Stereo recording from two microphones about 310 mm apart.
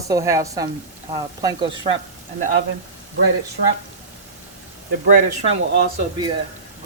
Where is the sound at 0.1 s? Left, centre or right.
Centre.